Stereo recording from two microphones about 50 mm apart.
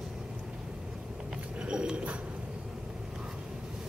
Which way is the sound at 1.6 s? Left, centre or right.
Centre.